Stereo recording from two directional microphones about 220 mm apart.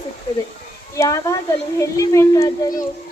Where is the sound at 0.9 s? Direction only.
15° left (ahead or behind).